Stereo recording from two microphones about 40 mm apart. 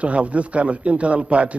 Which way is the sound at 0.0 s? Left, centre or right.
Right.